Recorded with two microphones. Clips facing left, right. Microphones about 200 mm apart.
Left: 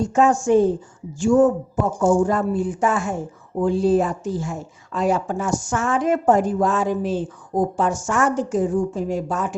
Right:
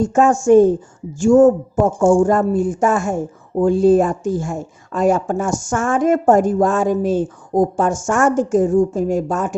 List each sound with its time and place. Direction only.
0.0 s speech: 50° right (ahead or behind)